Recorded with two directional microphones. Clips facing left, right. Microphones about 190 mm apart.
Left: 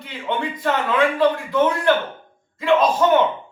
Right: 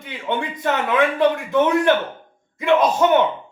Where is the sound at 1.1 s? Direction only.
20° right (ahead or behind).